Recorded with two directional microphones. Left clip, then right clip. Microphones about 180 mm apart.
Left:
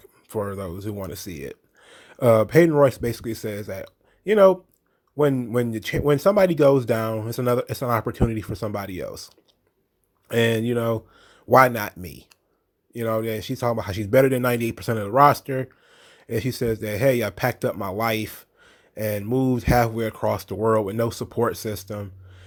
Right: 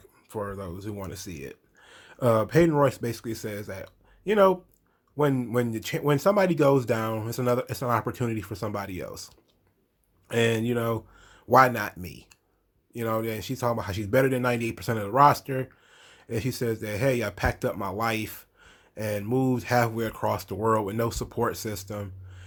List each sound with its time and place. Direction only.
0.3 s speech: 35° left (ahead or behind)